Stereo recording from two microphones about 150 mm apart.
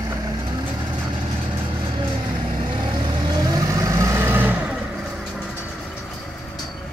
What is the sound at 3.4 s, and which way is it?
Vehicle, 25° right (ahead or behind).